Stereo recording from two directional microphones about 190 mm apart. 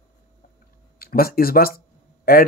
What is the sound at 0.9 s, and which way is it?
Speech, 50° left (ahead or behind).